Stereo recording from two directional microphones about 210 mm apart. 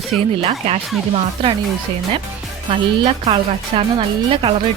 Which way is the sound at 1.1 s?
25° right (ahead or behind).